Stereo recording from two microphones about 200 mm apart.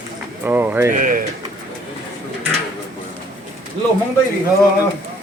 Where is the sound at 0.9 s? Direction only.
40° right (ahead or behind).